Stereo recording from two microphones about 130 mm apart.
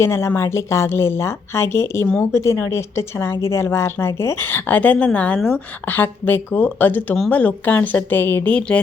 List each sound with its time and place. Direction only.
0.0 s a woman's voice: 20° left (ahead or behind)